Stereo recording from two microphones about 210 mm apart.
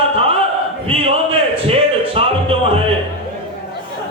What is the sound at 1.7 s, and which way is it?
Music, 25° right (ahead or behind).